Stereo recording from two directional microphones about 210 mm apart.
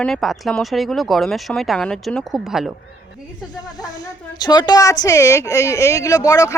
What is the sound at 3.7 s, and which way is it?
Speech, 15° left (ahead or behind).